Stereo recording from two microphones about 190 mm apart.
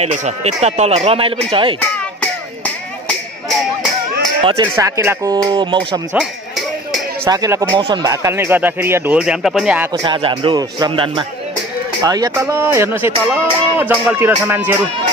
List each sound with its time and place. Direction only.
0.0 s speech: 35° right (ahead or behind)
4.4 s speech: 25° right (ahead or behind)
4.7 s speech: 15° right (ahead or behind)
7.2 s speech: 20° right (ahead or behind)
10.0 s speech: 25° right (ahead or behind)